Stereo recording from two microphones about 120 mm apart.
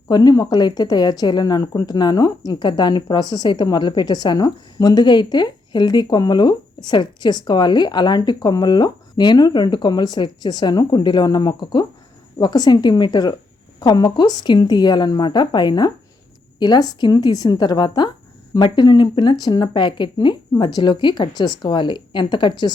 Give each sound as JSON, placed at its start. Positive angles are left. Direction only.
{"t": 0.1, "sound": "speech", "side_deg": 35}